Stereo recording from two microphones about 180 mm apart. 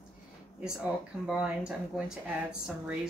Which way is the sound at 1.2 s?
5° right (ahead or behind).